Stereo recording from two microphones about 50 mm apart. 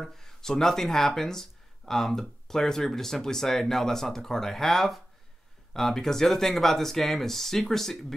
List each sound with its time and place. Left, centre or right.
0.0 s speech: centre